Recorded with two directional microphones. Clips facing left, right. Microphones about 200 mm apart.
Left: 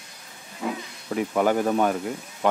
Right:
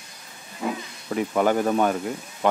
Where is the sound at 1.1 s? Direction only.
5° left (ahead or behind).